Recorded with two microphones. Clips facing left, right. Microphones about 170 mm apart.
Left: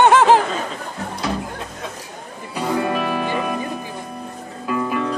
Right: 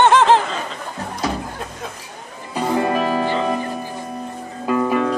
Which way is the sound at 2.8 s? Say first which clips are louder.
Right 3 dB; 30° right (ahead or behind).